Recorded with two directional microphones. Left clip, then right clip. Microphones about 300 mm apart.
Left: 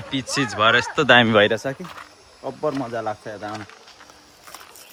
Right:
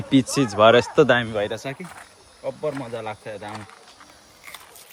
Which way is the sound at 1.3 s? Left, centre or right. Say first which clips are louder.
Left 9 dB; left.